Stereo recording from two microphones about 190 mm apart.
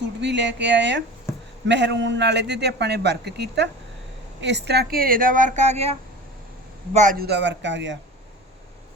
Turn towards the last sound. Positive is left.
turn(degrees=-70)  # may be behind; listen again after turning